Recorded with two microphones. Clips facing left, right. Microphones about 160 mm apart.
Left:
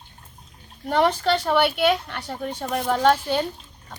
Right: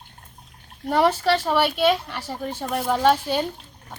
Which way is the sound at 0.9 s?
5° right (ahead or behind).